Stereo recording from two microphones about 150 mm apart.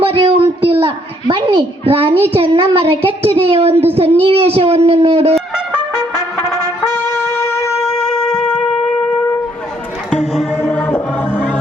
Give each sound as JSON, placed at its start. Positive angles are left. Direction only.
{"t": 0.0, "sound": "a woman's voice", "side_deg": -35}
{"t": 7.8, "sound": "shofar", "side_deg": 5}
{"t": 10.6, "sound": "music", "side_deg": 10}